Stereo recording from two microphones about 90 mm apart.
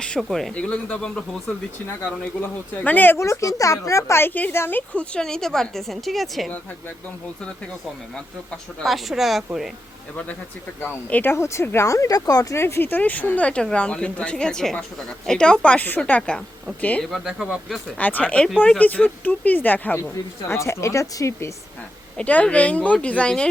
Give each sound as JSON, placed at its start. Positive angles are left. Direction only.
{"t": 0.2, "sound": "speech", "side_deg": 0}
{"t": 0.5, "sound": "speech", "side_deg": 10}
{"t": 1.5, "sound": "speech", "side_deg": 25}
{"t": 4.9, "sound": "speech", "side_deg": 10}
{"t": 8.8, "sound": "speech", "side_deg": 0}
{"t": 10.8, "sound": "speech", "side_deg": 20}
{"t": 12.5, "sound": "speech", "side_deg": 30}
{"t": 17.2, "sound": "speech", "side_deg": -10}
{"t": 17.9, "sound": "speech", "side_deg": 15}
{"t": 20.5, "sound": "speech", "side_deg": 30}
{"t": 22.2, "sound": "speech", "side_deg": 15}